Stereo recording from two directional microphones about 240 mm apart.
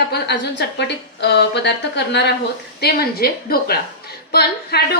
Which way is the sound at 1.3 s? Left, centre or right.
Left.